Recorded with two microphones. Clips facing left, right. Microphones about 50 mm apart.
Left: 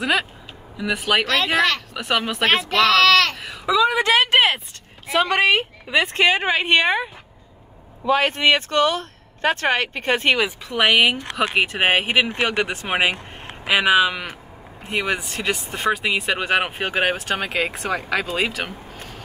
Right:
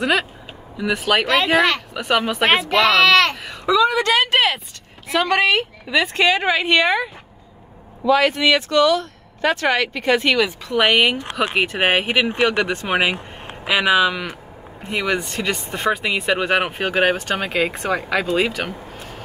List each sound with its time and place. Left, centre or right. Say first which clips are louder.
0.0 s speech: right 2 dB; centre
1.2 s speech: right 3 dB; centre
2.0 s speech: right 3 dB; centre
3.3 s a sound: right 2 dB; centre
3.9 s speech: even; centre
8.1 s speech: right 2 dB; left
10.4 s speech: right 2 dB; centre